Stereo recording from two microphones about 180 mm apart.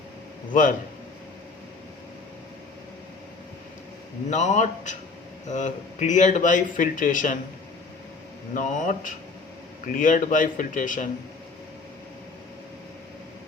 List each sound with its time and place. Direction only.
0.5 s speech: 45° left (ahead or behind)
4.3 s a man's voice: 40° left (ahead or behind)
8.5 s speech: 45° left (ahead or behind)